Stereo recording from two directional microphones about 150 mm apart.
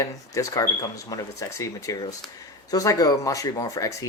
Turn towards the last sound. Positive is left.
turn(degrees=20)  # may be behind; listen again after turning